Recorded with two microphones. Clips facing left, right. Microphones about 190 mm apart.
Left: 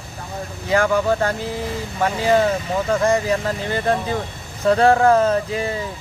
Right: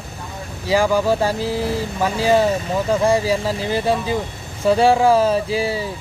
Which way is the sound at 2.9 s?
10° right (ahead or behind).